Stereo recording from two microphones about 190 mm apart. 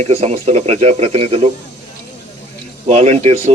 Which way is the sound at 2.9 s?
35° right (ahead or behind).